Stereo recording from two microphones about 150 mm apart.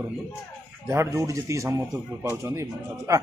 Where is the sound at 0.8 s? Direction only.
20° right (ahead or behind).